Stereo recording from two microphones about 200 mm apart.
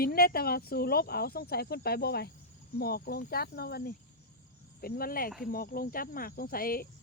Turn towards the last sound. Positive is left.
turn(degrees=45)  # may be behind; listen again after turning